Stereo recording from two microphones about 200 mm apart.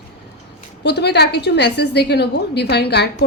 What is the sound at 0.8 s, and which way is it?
A woman's voice, 55° left (ahead or behind).